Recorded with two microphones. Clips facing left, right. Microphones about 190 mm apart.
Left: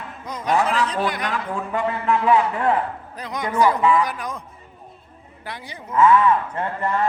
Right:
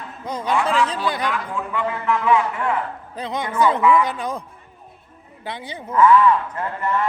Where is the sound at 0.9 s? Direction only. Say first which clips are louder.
Even; 30° right (ahead or behind).